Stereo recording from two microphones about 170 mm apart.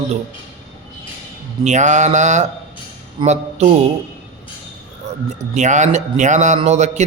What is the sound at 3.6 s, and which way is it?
Speech, 40° right (ahead or behind).